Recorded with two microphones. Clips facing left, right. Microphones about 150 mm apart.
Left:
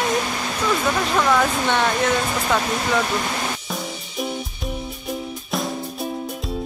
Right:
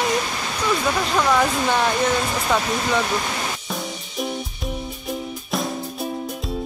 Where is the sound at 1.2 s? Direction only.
5° right (ahead or behind).